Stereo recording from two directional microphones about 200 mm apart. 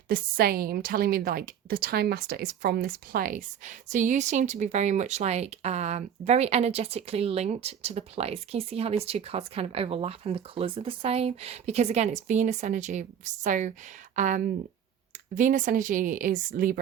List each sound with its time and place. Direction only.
0.1 s a woman's voice: 50° right (ahead or behind)